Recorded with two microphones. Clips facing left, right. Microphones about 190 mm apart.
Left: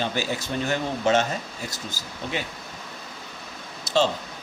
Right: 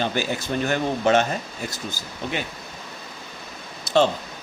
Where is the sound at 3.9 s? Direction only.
55° right (ahead or behind).